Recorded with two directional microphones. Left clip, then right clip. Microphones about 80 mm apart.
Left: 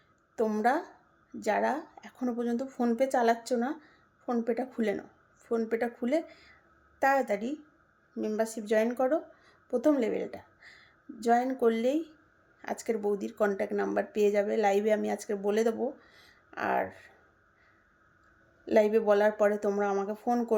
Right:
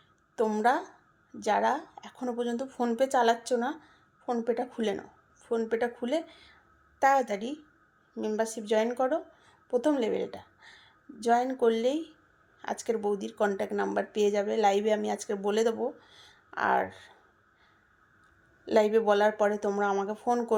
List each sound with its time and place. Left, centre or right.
0.3 s a woman's voice: left
16.0 s a sound: left
18.6 s speech: left